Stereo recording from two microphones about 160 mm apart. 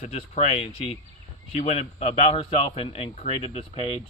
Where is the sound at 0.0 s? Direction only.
45° left (ahead or behind).